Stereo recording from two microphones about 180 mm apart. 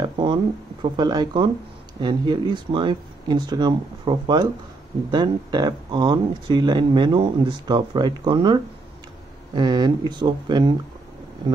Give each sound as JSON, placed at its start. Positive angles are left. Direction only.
{"t": 0.0, "sound": "a sound", "side_deg": -25}
{"t": 0.9, "sound": "speech", "side_deg": -25}
{"t": 9.6, "sound": "speech", "side_deg": -25}